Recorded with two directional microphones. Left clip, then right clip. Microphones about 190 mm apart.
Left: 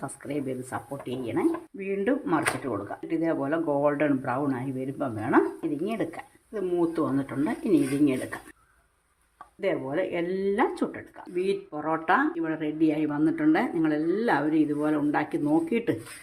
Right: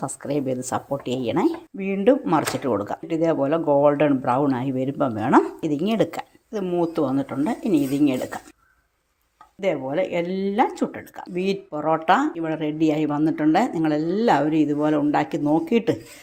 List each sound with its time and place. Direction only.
0.0 s speech: 25° right (ahead or behind)
9.6 s speech: 20° right (ahead or behind)